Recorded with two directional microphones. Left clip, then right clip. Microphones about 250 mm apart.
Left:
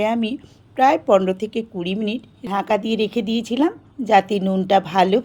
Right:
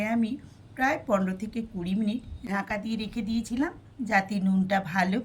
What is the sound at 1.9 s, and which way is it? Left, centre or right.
A woman's voice, left.